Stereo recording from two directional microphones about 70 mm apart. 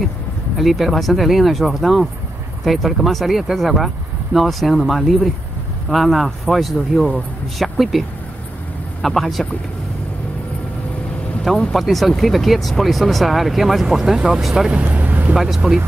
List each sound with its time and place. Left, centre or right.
0.6 s speech: centre
7.6 s a sound: centre
9.0 s speech: centre
11.7 s speech: centre
15.0 s vehicle: right
15.3 s speech: centre